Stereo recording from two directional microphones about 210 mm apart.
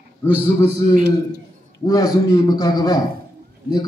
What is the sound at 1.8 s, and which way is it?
A man's voice, 15° left (ahead or behind).